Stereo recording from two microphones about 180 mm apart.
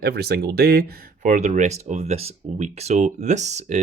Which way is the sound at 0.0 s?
60° right (ahead or behind).